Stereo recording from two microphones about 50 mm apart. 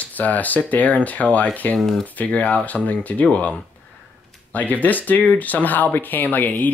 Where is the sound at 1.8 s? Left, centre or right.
Centre.